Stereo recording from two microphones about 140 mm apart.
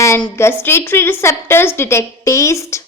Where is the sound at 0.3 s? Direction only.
15° left (ahead or behind).